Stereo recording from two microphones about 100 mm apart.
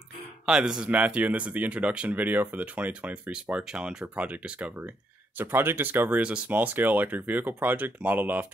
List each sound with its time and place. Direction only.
0.5 s speech: 10° right (ahead or behind)